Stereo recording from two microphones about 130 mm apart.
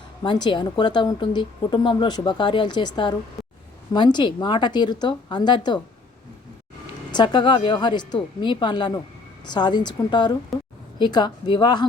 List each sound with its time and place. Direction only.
0.2 s a woman's voice: 35° left (ahead or behind)
7.1 s a woman's voice: 35° left (ahead or behind)